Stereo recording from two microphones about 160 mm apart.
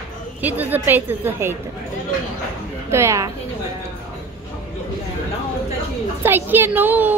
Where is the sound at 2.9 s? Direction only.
15° right (ahead or behind).